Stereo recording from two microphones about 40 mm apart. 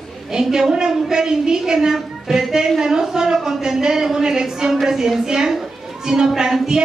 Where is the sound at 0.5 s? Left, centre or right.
Centre.